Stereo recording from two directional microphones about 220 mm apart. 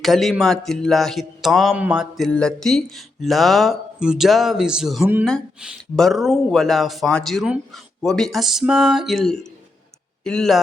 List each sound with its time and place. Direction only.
0.0 s a man's voice: centre (ahead or behind)